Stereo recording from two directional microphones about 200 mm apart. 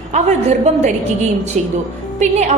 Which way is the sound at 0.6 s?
35° right (ahead or behind).